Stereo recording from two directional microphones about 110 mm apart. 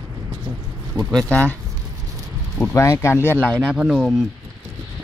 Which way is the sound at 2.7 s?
25° left (ahead or behind).